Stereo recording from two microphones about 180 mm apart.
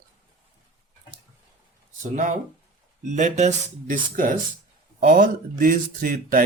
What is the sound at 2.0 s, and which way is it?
Speech, 45° right (ahead or behind).